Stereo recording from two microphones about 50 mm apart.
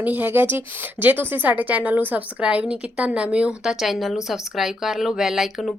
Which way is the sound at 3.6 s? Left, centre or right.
Centre.